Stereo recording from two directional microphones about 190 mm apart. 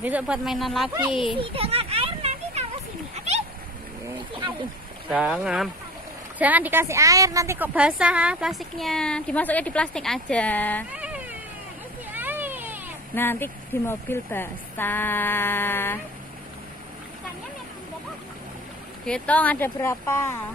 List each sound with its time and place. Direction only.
0.0 s speech: 5° right (ahead or behind)
1.4 s children playing: 30° right (ahead or behind)
5.0 s speech: 5° right (ahead or behind)
10.9 s a sound: 10° right (ahead or behind)
13.1 s speech: 10° left (ahead or behind)
19.0 s speech: 5° left (ahead or behind)